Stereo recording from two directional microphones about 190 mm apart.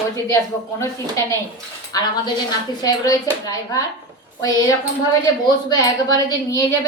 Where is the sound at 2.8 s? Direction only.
20° left (ahead or behind).